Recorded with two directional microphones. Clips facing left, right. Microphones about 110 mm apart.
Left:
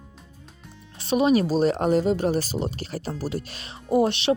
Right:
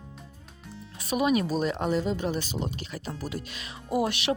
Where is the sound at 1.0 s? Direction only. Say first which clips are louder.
Left 5 dB; 30° left (ahead or behind).